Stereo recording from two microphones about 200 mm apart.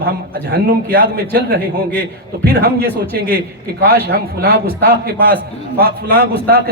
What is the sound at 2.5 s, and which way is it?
A man's voice, 50° right (ahead or behind).